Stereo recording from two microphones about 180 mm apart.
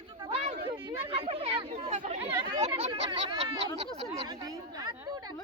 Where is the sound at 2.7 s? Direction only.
25° right (ahead or behind).